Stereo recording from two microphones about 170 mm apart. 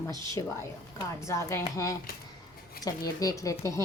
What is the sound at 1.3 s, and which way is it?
Speech, 15° left (ahead or behind).